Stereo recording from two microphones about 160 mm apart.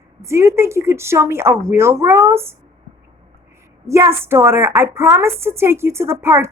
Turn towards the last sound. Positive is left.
turn(degrees=-15)  # may be behind; listen again after turning